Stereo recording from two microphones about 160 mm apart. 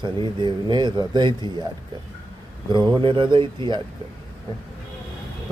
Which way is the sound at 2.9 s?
30° right (ahead or behind).